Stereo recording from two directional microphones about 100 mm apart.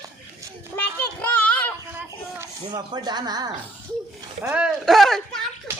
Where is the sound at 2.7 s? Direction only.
45° right (ahead or behind).